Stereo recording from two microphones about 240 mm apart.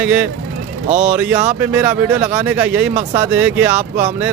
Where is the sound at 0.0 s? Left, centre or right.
Centre.